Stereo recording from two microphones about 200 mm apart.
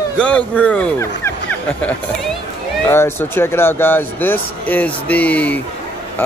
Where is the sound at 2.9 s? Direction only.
10° left (ahead or behind).